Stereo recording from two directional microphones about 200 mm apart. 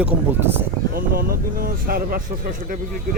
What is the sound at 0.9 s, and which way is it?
Speech, 45° right (ahead or behind).